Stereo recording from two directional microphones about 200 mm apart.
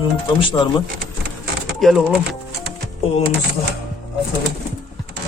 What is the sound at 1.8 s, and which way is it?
Speech, centre (ahead or behind).